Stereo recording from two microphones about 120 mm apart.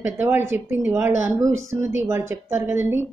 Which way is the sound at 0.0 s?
20° right (ahead or behind).